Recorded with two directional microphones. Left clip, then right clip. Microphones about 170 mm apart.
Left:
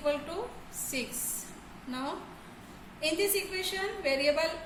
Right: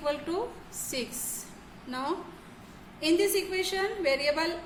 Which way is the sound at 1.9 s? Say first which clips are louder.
Right 4 dB; 40° right (ahead or behind).